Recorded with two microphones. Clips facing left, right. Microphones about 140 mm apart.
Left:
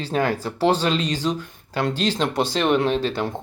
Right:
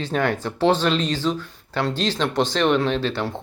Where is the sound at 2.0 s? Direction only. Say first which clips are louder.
Left 1 dB; 45° left (ahead or behind).